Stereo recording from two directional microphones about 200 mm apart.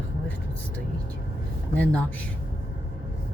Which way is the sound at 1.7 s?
5° left (ahead or behind).